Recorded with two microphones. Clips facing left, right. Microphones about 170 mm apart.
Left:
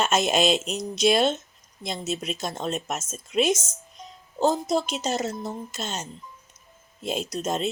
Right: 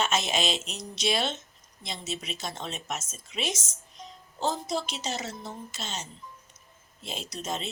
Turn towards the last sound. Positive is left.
turn(degrees=45)  # may be behind; listen again after turning